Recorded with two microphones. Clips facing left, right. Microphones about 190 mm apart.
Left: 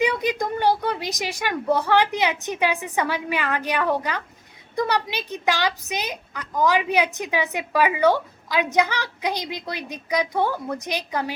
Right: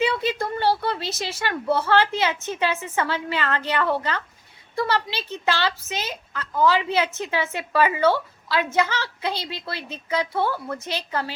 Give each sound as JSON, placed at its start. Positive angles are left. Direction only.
{"t": 0.0, "sound": "a woman's voice", "side_deg": 15}